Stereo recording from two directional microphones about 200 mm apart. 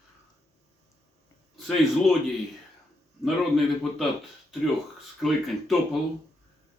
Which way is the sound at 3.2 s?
Centre (ahead or behind).